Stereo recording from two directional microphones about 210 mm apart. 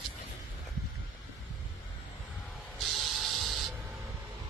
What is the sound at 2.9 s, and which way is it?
Spray, centre (ahead or behind).